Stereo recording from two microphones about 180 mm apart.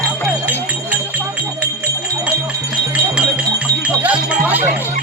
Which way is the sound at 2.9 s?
5° right (ahead or behind).